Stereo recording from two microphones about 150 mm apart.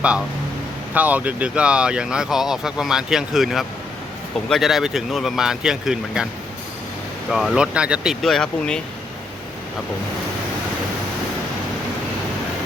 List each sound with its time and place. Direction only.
0.9 s speech: 10° right (ahead or behind)
7.3 s speech: centre (ahead or behind)